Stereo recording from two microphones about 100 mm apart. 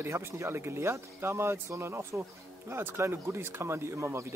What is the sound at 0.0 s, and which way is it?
Speech, 25° right (ahead or behind).